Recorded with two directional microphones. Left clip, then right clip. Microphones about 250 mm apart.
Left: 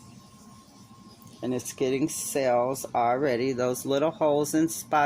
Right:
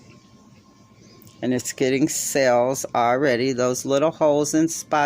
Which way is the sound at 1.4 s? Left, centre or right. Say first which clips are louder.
Right 6 dB; right.